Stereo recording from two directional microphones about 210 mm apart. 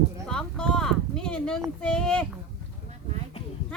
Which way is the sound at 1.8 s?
5° left (ahead or behind).